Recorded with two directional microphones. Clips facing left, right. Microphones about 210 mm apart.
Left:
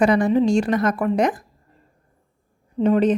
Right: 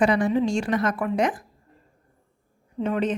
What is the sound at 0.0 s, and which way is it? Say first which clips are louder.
A woman's voice: left 4 dB; 40° left (ahead or behind).